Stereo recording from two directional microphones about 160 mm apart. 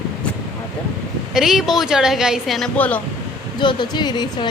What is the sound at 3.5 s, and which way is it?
Speech, 30° left (ahead or behind).